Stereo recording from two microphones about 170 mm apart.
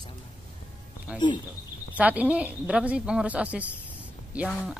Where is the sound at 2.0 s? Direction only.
10° right (ahead or behind).